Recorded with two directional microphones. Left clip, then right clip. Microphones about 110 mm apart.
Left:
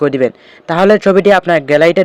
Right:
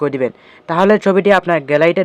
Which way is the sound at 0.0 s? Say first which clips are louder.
Left 5 dB; 25° left (ahead or behind).